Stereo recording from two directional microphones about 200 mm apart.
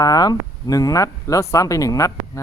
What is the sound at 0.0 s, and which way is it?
Speech, 20° left (ahead or behind).